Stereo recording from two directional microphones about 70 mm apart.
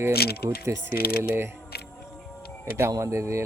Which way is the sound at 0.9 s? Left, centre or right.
Right.